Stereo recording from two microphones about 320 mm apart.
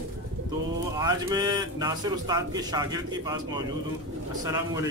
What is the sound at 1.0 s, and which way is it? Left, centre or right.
A man's voice, centre.